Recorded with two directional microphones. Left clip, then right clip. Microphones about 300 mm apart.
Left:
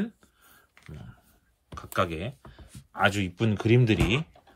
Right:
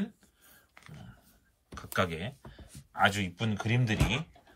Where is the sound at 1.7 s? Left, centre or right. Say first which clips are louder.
Left 3 dB; centre.